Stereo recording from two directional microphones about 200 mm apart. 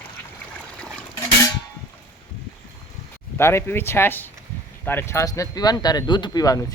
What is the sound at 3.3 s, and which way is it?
Speech, 10° left (ahead or behind).